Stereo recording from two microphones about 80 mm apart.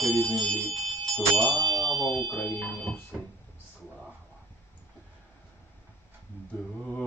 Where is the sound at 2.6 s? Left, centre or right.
Centre.